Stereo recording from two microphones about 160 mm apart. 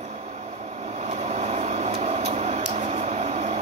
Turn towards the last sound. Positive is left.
turn(degrees=-40)  # may be behind; listen again after turning